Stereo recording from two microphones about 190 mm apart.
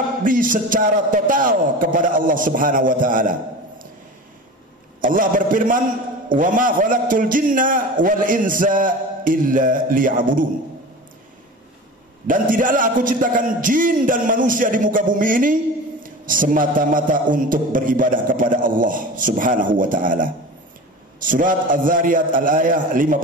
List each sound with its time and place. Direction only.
0.2 s music: 45° right (ahead or behind)
5.0 s music: 45° right (ahead or behind)
12.3 s music: 45° right (ahead or behind)